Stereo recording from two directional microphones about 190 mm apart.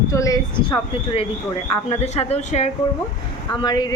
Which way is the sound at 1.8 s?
35° left (ahead or behind).